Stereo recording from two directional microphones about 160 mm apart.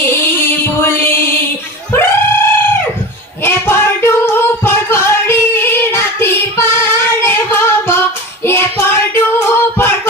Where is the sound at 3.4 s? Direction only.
15° left (ahead or behind).